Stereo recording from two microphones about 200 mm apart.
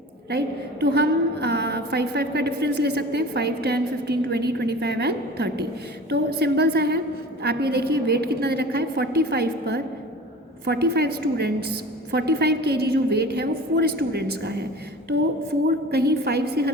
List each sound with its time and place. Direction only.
0.3 s a woman's voice: 55° right (ahead or behind)
15.9 s a woman's voice: 50° right (ahead or behind)